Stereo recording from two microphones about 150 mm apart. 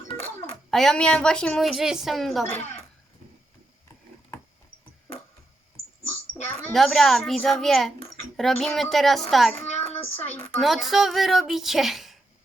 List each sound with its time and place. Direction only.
0.7 s a woman's voice: 5° left (ahead or behind)
6.3 s a woman's voice: centre (ahead or behind)
10.6 s a woman's voice: centre (ahead or behind)